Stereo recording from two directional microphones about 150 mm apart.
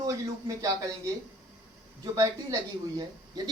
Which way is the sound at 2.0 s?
20° right (ahead or behind).